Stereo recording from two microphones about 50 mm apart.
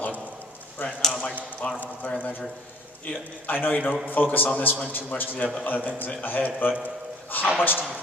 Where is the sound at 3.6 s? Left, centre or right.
Left.